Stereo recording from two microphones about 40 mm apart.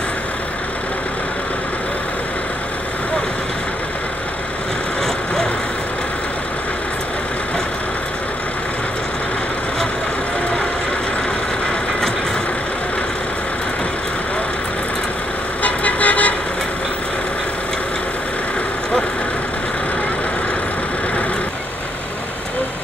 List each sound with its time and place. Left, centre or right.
5.0 s vehicle: centre
15.6 s vehicle: left